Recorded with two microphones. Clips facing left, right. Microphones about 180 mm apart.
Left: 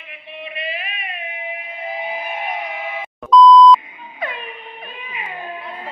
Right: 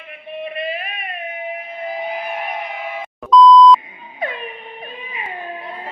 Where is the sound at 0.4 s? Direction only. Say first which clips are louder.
Right 4 dB; 45° right (ahead or behind).